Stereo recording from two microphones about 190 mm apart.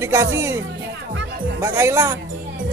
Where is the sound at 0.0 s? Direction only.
15° right (ahead or behind).